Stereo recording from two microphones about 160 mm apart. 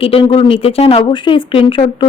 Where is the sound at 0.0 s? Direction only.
35° left (ahead or behind).